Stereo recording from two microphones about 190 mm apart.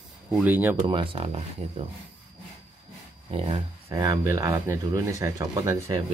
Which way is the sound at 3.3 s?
30° right (ahead or behind).